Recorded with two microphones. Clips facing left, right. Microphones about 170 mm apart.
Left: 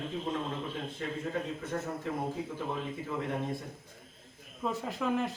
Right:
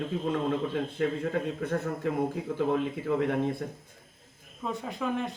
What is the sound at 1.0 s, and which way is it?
Speech, 70° right (ahead or behind).